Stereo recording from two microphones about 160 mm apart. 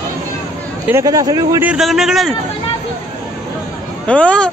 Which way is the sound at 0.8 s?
20° right (ahead or behind).